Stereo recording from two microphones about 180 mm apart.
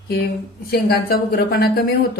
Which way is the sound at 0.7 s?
60° left (ahead or behind).